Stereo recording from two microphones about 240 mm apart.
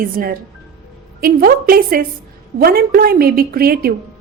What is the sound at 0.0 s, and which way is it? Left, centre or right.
A woman's voice, right.